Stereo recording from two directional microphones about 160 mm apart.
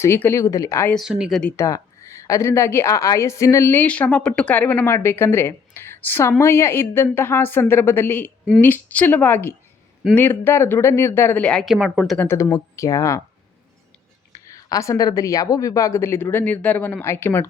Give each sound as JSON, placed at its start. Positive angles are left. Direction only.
{"t": 0.0, "sound": "a woman's voice", "side_deg": 15}
{"t": 0.9, "sound": "speech", "side_deg": -5}
{"t": 1.5, "sound": "a woman's voice", "side_deg": 20}
{"t": 14.5, "sound": "a woman's voice", "side_deg": 20}